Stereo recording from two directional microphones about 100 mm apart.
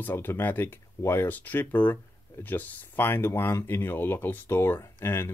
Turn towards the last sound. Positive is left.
turn(degrees=25)  # may be behind; listen again after turning